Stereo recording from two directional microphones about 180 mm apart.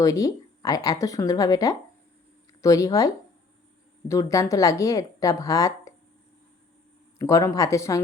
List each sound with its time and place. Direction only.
0.0 s a woman's voice: 20° left (ahead or behind)
4.1 s a woman's voice: 20° left (ahead or behind)
7.2 s a woman's voice: 15° left (ahead or behind)